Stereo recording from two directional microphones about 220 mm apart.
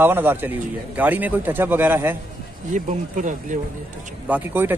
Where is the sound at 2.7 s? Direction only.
35° right (ahead or behind).